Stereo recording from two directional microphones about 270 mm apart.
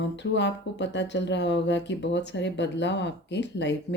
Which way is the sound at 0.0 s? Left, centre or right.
Left.